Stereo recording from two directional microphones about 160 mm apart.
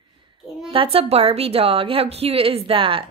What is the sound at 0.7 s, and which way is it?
A woman's voice, 35° right (ahead or behind).